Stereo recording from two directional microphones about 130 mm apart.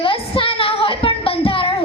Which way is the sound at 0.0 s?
45° left (ahead or behind).